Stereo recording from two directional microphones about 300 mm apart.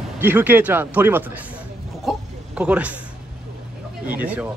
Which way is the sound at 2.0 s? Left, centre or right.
Centre.